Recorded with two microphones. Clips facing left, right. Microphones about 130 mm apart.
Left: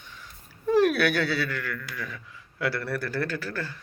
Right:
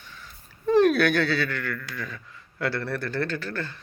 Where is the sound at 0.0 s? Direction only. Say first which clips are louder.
Right 1 dB; 15° left (ahead or behind).